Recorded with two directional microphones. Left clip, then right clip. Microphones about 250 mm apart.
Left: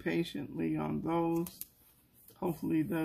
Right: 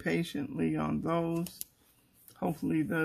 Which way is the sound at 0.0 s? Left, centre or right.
Right.